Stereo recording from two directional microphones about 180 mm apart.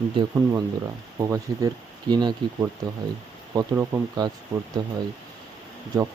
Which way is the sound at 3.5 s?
15° right (ahead or behind).